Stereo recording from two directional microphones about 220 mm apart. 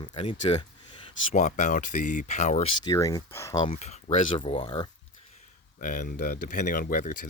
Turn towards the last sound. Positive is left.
turn(degrees=40)  # may be behind; listen again after turning